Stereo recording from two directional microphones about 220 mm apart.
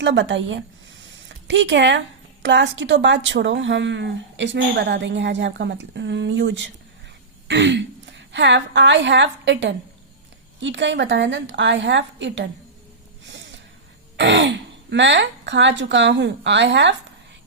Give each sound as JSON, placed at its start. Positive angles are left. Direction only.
{"t": 0.0, "sound": "a woman's voice", "side_deg": -55}
{"t": 7.4, "sound": "throat clearing", "side_deg": -55}
{"t": 8.3, "sound": "a woman's voice", "side_deg": -55}
{"t": 13.2, "sound": "a sound", "side_deg": -55}
{"t": 14.2, "sound": "a woman's voice", "side_deg": -55}